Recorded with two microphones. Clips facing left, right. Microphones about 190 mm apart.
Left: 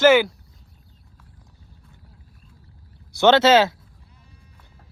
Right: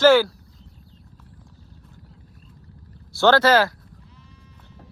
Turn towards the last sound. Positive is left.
turn(degrees=25)  # may be behind; listen again after turning